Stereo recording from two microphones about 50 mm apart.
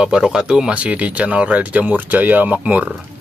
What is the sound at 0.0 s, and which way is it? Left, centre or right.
Speech, centre.